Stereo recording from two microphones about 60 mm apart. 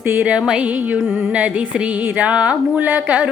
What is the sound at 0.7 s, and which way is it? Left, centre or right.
Music, right.